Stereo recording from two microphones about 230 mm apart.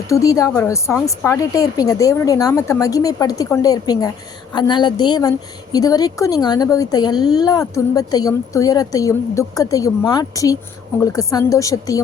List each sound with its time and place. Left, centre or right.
0.1 s a woman's voice: centre